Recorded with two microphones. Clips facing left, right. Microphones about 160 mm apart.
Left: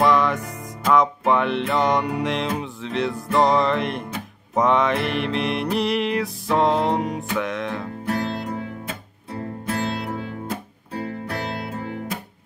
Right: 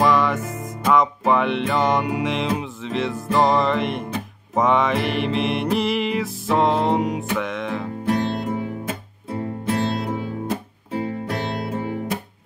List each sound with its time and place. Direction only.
0.0 s music: centre (ahead or behind)
8.0 s music: 20° right (ahead or behind)